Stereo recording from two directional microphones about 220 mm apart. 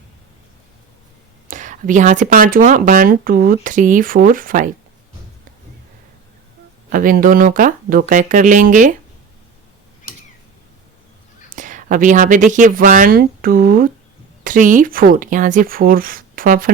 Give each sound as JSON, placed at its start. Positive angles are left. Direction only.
{"t": 1.5, "sound": "speech", "side_deg": -35}
{"t": 6.9, "sound": "speech", "side_deg": -40}
{"t": 11.4, "sound": "speech", "side_deg": -35}